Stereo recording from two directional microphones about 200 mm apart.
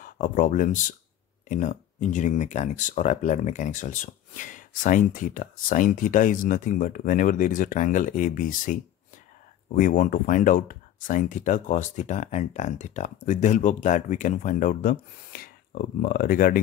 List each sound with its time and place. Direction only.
0.0 s speech: 40° left (ahead or behind)